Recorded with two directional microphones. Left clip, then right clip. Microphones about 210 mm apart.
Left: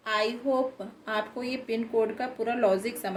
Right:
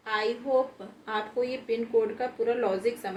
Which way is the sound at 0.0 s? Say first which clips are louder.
Left 2 dB; 55° left (ahead or behind).